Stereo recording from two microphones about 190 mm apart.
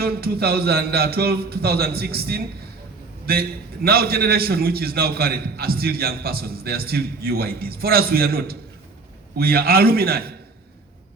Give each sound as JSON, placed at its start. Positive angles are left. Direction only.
{"t": 0.0, "sound": "a man's voice", "side_deg": -55}